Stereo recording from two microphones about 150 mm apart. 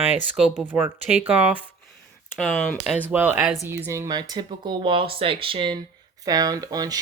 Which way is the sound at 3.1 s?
15° right (ahead or behind).